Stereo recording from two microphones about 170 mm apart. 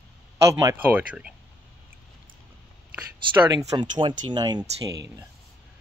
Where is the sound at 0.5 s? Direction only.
20° right (ahead or behind).